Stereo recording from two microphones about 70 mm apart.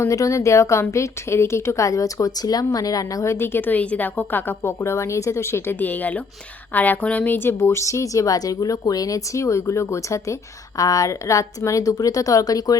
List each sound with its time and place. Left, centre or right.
0.1 s a woman's voice: left
3.3 s a woman's voice: left
10.8 s a woman's voice: left